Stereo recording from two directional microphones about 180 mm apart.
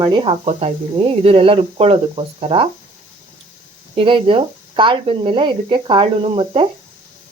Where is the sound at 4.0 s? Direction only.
30° right (ahead or behind).